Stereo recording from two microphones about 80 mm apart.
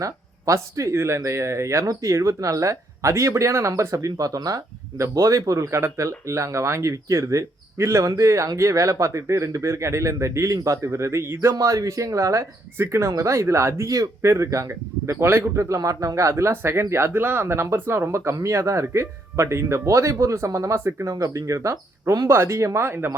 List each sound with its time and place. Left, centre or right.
0.0 s speech: right
11.5 s speech: right
13.8 s speech: right